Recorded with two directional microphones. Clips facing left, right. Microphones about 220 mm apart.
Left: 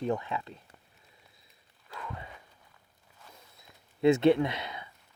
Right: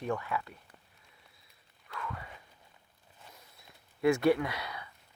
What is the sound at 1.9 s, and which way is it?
Walk, 25° left (ahead or behind).